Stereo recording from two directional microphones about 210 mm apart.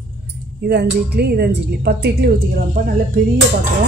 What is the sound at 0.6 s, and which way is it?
Speech, 50° right (ahead or behind).